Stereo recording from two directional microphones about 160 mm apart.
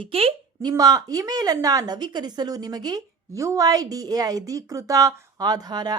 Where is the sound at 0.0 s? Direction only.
35° right (ahead or behind).